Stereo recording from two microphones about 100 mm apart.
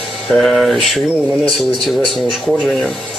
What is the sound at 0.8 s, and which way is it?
Speech, centre (ahead or behind).